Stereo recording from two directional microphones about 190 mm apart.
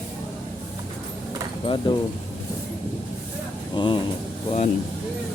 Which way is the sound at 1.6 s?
25° left (ahead or behind).